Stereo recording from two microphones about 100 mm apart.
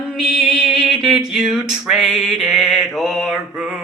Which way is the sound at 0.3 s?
Centre (ahead or behind).